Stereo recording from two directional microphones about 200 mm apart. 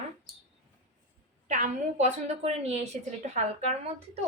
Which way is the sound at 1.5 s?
35° right (ahead or behind).